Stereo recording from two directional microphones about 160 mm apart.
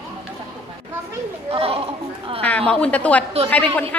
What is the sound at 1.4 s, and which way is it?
Children playing, 35° right (ahead or behind).